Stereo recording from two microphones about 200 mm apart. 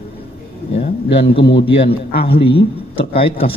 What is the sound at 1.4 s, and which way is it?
Speech, 60° left (ahead or behind).